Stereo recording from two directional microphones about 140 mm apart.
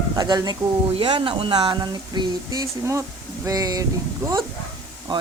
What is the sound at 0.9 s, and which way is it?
Speech, 40° right (ahead or behind).